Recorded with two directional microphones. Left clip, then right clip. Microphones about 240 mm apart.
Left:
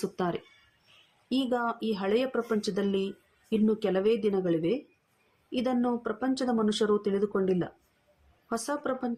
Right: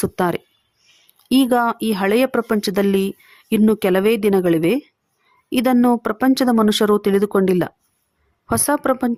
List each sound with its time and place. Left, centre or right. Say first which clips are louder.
0.0 s speech: right 11 dB; right